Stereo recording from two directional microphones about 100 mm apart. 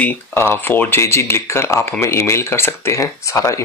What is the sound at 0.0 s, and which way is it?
Speech, 20° left (ahead or behind).